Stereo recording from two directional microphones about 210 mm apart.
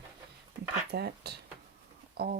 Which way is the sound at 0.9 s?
50° right (ahead or behind).